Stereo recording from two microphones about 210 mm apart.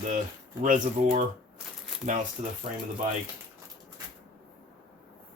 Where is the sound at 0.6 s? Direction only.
35° right (ahead or behind).